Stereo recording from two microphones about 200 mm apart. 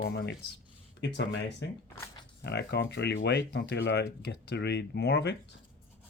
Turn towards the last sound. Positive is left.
turn(degrees=55)  # may be behind; listen again after turning